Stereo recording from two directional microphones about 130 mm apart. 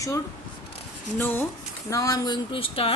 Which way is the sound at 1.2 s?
15° left (ahead or behind).